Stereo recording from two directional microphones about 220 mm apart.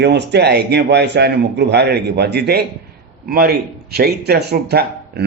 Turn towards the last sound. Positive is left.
turn(degrees=-50)  # may be behind; listen again after turning